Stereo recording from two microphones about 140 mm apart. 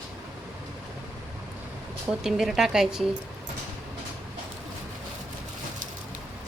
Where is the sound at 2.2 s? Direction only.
5° right (ahead or behind).